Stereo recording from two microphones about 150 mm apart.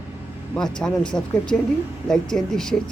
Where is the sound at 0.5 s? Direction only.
5° left (ahead or behind).